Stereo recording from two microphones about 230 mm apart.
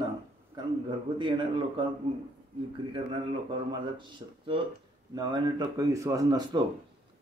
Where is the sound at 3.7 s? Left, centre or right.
Right.